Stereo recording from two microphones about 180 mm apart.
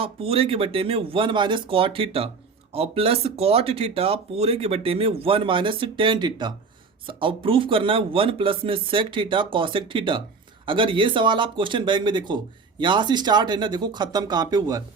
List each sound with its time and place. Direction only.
0.0 s speech: 35° right (ahead or behind)